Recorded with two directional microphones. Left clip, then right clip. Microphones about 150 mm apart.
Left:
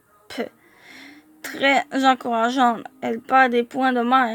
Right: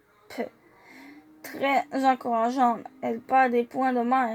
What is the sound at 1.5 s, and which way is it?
Speech, 30° left (ahead or behind).